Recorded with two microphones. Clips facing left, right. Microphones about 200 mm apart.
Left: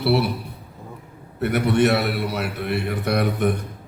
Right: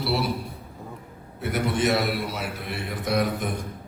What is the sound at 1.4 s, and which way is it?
A man's voice, 65° left (ahead or behind).